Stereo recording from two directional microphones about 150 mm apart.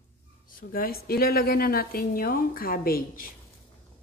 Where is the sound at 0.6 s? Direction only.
75° left (ahead or behind).